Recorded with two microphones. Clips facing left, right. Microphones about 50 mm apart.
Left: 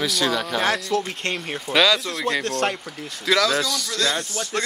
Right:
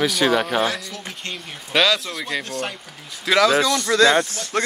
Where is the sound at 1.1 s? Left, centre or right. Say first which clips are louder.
Left 5 dB; left.